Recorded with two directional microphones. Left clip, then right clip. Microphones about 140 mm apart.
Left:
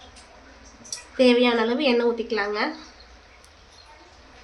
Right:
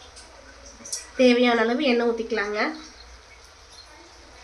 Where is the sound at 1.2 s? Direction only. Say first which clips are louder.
Even; 20° left (ahead or behind).